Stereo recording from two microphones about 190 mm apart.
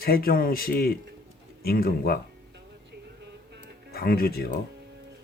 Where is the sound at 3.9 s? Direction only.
55° left (ahead or behind).